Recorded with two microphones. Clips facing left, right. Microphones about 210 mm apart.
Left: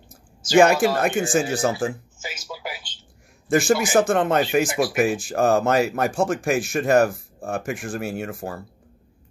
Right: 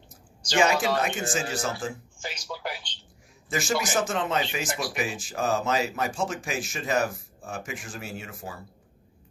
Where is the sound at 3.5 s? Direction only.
55° left (ahead or behind).